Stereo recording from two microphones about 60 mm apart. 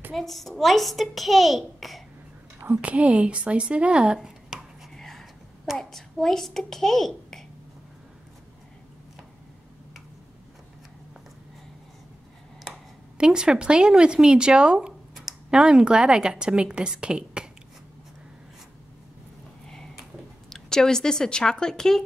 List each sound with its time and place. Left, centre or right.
0.1 s a child's voice: centre
2.7 s speech: right
4.9 s a sound: centre
5.8 s a child's voice: centre
13.2 s speech: centre
19.6 s a sound: centre
20.4 s speech: centre